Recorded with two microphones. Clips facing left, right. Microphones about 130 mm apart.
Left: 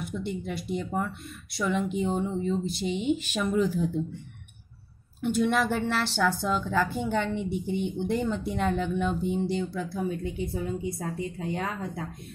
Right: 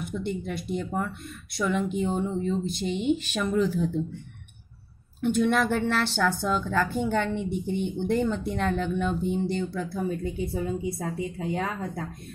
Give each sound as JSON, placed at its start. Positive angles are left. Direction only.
{"t": 0.0, "sound": "a woman's voice", "side_deg": 5}
{"t": 5.2, "sound": "a woman's voice", "side_deg": 5}